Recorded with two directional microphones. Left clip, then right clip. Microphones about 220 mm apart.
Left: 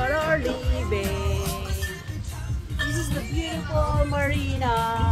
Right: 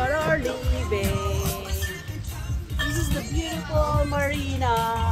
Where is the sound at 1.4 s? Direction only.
30° right (ahead or behind).